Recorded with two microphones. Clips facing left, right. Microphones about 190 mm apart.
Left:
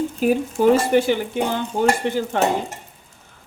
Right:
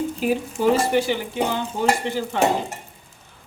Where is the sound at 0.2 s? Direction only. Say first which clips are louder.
Left 6 dB; 50° left (ahead or behind).